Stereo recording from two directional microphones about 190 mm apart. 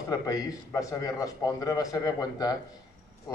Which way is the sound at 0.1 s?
20° left (ahead or behind).